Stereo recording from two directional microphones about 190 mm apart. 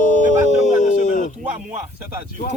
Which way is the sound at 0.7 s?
40° left (ahead or behind).